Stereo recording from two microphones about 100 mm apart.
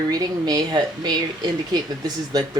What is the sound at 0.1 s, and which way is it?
Speech, 40° right (ahead or behind).